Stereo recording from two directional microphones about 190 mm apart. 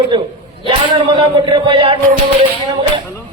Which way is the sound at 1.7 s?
30° right (ahead or behind).